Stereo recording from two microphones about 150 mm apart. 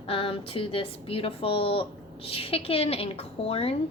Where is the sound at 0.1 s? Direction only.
35° left (ahead or behind).